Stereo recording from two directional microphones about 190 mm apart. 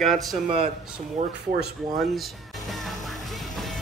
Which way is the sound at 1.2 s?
40° right (ahead or behind).